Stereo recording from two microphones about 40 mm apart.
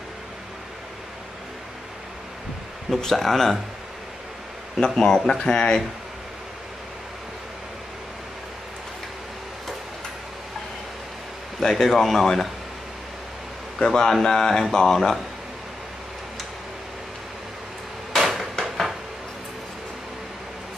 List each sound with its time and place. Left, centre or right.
3.0 s speech: centre
4.7 s speech: centre
11.6 s speech: centre
13.7 s speech: centre
18.1 s hammer: centre